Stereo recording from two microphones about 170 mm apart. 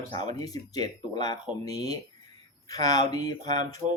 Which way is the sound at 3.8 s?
20° right (ahead or behind).